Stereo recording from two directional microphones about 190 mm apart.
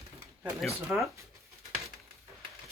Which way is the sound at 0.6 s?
Centre (ahead or behind).